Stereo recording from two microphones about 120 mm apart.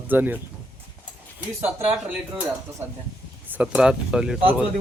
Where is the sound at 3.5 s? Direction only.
10° right (ahead or behind).